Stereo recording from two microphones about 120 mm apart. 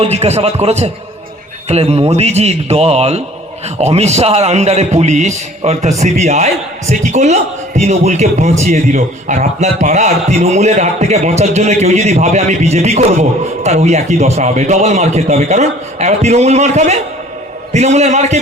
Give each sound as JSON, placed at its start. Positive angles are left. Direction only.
{"t": 0.0, "sound": "a man's voice", "side_deg": -65}